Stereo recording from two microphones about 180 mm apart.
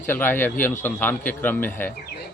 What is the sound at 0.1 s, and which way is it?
Speech, 10° left (ahead or behind).